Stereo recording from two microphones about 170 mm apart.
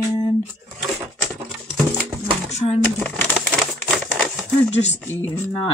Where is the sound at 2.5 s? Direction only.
40° left (ahead or behind).